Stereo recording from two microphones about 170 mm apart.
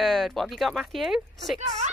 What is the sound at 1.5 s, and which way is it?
Speech, 40° right (ahead or behind).